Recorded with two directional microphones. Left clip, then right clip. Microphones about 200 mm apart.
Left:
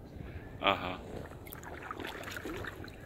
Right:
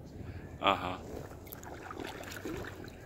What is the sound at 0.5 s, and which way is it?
Speech, 5° right (ahead or behind).